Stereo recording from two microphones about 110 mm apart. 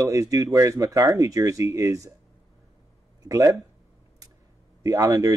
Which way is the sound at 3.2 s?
35° right (ahead or behind).